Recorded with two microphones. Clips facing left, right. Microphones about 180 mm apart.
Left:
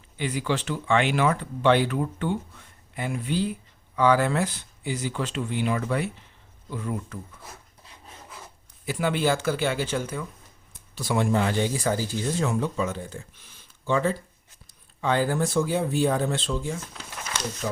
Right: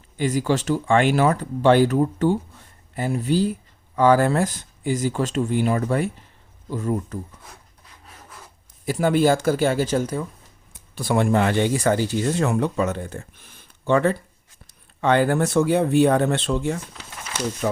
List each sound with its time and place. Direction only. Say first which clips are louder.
0.2 s speech: right 6 dB; 45° right (ahead or behind)
8.9 s speech: right 6 dB; 45° right (ahead or behind)
10.9 s speech: right 4 dB; 55° right (ahead or behind)